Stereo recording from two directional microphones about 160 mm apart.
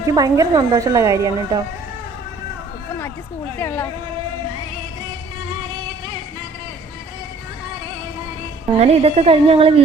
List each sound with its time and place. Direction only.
0.1 s a woman's voice: 20° right (ahead or behind)
3.6 s speech: 15° left (ahead or behind)
8.8 s a woman's voice: 40° right (ahead or behind)